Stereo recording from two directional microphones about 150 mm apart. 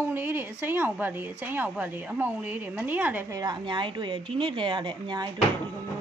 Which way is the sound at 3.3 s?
25° right (ahead or behind).